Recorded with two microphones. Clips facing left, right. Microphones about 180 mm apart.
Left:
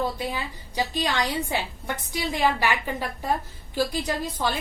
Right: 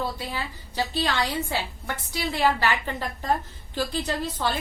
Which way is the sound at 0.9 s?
15° left (ahead or behind).